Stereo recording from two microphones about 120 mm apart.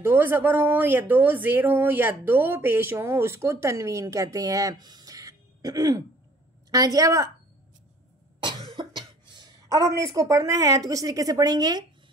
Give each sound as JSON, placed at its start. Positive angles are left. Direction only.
{"t": 0.0, "sound": "speech", "side_deg": -15}
{"t": 8.6, "sound": "speech", "side_deg": -40}